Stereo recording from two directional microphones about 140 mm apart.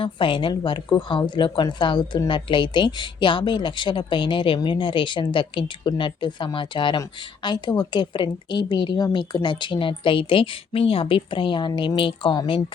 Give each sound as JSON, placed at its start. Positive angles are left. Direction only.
{"t": 0.0, "sound": "a woman's voice", "side_deg": 35}